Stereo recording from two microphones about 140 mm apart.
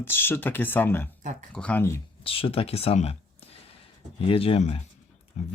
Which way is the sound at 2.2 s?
40° left (ahead or behind).